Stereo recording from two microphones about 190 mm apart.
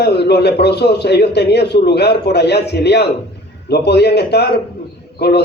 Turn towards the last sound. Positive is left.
turn(degrees=60)  # may be behind; listen again after turning